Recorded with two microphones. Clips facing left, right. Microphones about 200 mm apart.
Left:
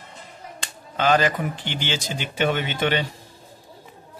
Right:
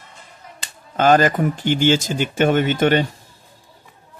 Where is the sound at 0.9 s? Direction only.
45° right (ahead or behind).